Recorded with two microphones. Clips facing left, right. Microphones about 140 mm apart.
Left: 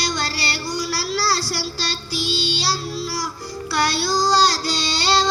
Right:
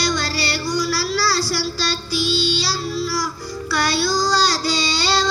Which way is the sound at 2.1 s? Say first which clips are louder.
Right 4 dB; 70° left (ahead or behind).